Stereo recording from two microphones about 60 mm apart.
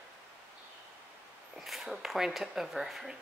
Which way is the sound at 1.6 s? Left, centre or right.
Centre.